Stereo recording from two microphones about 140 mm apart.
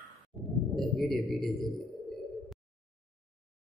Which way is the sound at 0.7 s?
Centre (ahead or behind).